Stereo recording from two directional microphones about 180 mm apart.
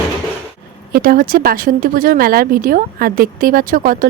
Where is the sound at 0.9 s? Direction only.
55° right (ahead or behind).